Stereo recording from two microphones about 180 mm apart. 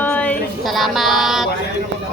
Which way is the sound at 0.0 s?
10° left (ahead or behind).